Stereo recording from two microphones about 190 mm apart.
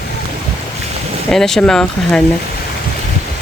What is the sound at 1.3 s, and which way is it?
Speech, centre (ahead or behind).